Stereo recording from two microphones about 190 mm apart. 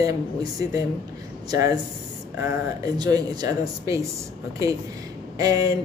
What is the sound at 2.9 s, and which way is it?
Speech, 20° right (ahead or behind).